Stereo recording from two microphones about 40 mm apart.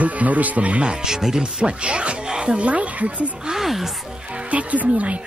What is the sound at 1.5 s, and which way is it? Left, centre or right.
Speech, right.